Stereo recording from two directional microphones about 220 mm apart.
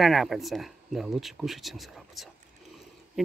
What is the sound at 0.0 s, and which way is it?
Speech, centre (ahead or behind).